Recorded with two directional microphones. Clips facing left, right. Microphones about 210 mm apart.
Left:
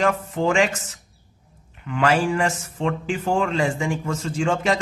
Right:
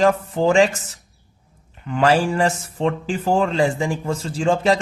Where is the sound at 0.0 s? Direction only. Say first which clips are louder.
Right 4 dB; 35° right (ahead or behind).